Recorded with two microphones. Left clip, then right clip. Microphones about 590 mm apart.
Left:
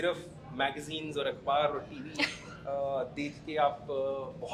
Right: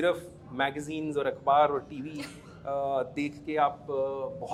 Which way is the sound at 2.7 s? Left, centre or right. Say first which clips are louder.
Right 3 dB; right.